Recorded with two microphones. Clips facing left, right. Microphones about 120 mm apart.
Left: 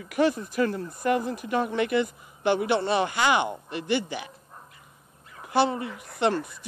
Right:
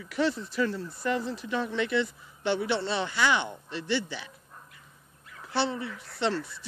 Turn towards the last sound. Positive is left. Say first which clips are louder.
# left 2 dB
turn(degrees=15)  # may be behind; listen again after turning